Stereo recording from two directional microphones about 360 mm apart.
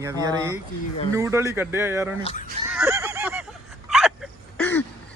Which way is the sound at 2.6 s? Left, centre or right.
Centre.